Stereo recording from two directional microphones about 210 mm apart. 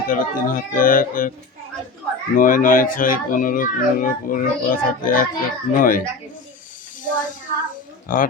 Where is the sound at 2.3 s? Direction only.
40° left (ahead or behind).